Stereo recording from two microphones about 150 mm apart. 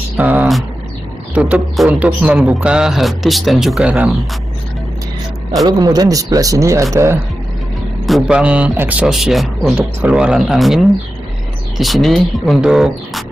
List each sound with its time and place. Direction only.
0.2 s speech: 10° right (ahead or behind)
5.7 s speech: 25° right (ahead or behind)
8.1 s speech: 5° right (ahead or behind)